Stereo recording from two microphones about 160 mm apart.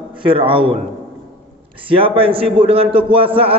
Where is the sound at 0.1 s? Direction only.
30° right (ahead or behind).